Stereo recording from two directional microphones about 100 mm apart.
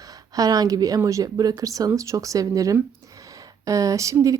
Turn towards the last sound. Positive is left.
turn(degrees=-35)  # may be behind; listen again after turning